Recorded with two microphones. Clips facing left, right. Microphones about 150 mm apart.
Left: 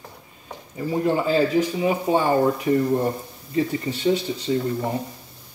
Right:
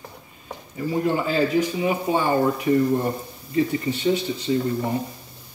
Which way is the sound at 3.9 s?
35° left (ahead or behind).